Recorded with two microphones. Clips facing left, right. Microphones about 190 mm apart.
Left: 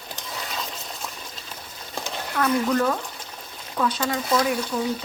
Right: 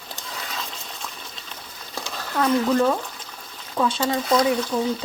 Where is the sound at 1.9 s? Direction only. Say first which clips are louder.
Left 1 dB; 20° left (ahead or behind).